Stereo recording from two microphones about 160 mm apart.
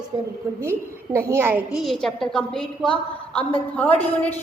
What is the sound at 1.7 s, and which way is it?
A woman's voice, centre (ahead or behind).